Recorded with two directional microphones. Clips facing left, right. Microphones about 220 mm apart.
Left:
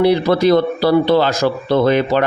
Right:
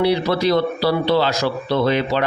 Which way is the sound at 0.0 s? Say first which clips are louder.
Left 5 dB; 50° left (ahead or behind).